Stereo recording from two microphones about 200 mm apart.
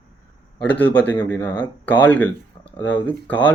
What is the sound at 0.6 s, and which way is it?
Speech, 5° left (ahead or behind).